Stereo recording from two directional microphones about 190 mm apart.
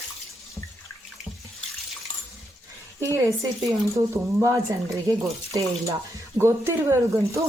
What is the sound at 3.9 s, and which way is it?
Speech, 15° right (ahead or behind).